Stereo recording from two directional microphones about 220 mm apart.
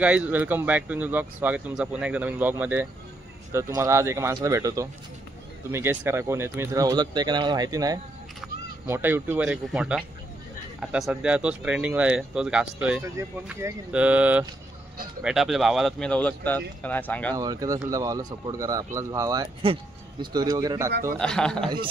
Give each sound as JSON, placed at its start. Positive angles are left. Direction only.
{"t": 0.0, "sound": "speech", "side_deg": -5}
{"t": 17.4, "sound": "speech", "side_deg": -15}
{"t": 21.2, "sound": "speech", "side_deg": 5}